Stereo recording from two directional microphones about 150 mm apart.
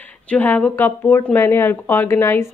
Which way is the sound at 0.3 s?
10° left (ahead or behind).